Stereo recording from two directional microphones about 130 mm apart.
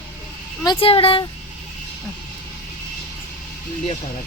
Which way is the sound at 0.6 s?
40° left (ahead or behind).